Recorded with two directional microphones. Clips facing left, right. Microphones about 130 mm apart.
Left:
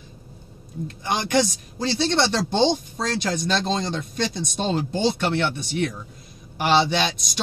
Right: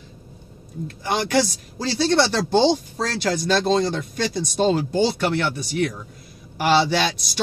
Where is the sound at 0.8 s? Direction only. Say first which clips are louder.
Right 2 dB; 20° left (ahead or behind).